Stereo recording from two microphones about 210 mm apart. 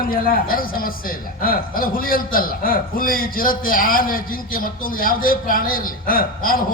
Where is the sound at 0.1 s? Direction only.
45° left (ahead or behind).